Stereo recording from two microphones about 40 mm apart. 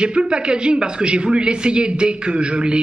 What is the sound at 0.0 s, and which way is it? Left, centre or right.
Speech, right.